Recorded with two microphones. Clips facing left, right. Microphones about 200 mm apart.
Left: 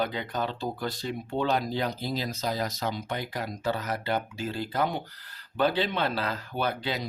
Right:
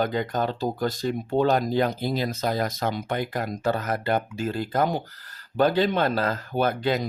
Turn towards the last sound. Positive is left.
turn(degrees=-50)  # may be behind; listen again after turning